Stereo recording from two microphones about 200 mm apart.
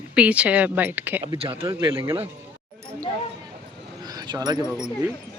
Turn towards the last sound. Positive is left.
turn(degrees=-5)  # may be behind; listen again after turning